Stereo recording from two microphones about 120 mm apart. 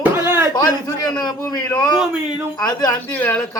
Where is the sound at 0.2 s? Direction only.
20° right (ahead or behind).